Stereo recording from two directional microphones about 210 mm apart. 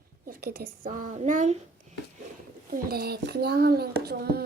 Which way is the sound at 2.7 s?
45° right (ahead or behind).